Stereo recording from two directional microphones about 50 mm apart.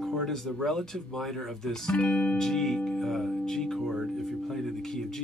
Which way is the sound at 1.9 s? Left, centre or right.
Centre.